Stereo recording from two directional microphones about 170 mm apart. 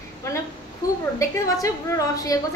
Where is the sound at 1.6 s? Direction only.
20° left (ahead or behind).